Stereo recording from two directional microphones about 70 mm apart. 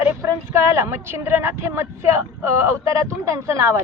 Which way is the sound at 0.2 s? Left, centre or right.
Right.